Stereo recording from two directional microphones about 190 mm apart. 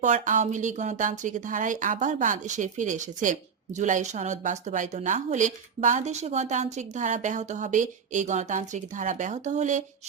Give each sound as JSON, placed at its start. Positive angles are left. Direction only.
{"t": 0.0, "sound": "a woman's voice", "side_deg": -40}